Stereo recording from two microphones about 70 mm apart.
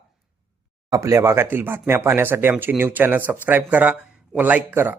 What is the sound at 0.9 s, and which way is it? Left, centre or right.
Speech, right.